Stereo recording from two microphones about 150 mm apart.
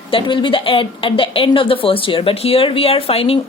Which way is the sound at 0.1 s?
35° left (ahead or behind).